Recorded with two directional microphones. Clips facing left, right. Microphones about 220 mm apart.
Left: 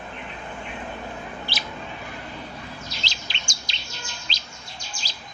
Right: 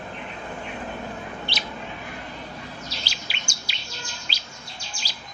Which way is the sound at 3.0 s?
10° right (ahead or behind).